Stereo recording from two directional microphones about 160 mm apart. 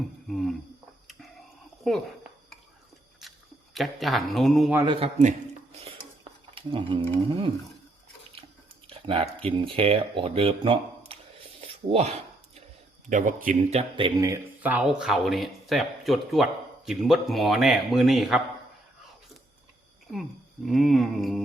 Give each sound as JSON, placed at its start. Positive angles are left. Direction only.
{"t": 0.3, "sound": "a sound", "side_deg": 0}
{"t": 1.8, "sound": "speech", "side_deg": 0}
{"t": 3.8, "sound": "speech", "side_deg": 0}
{"t": 4.9, "sound": "speech", "side_deg": -35}
{"t": 6.5, "sound": "speech", "side_deg": -35}
{"t": 8.9, "sound": "a sound", "side_deg": -35}
{"t": 9.4, "sound": "speech", "side_deg": -35}
{"t": 11.6, "sound": "a sound", "side_deg": -40}
{"t": 13.1, "sound": "speech", "side_deg": -55}
{"t": 14.3, "sound": "speech", "side_deg": -15}
{"t": 20.7, "sound": "speech", "side_deg": 0}